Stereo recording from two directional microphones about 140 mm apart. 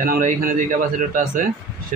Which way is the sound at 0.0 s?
90° right.